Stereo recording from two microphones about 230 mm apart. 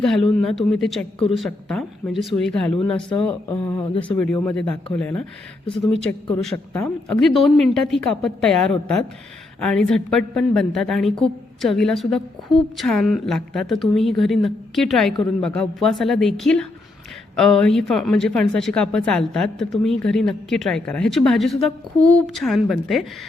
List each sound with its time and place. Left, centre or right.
0.0 s speech: centre
5.6 s speech: left
6.4 s speech: centre